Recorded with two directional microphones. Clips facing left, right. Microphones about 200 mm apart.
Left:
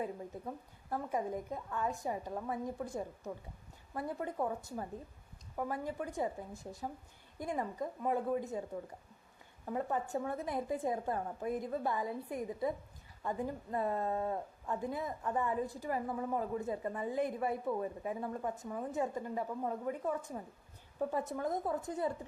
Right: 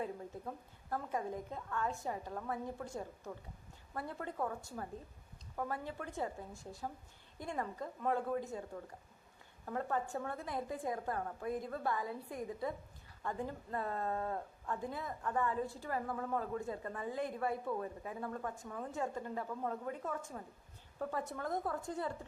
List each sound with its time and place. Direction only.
0.0 s a woman's voice: 15° left (ahead or behind)